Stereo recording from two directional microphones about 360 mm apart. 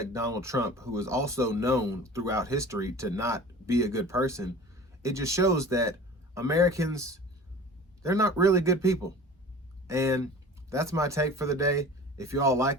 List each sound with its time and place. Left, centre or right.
0.0 s speech: centre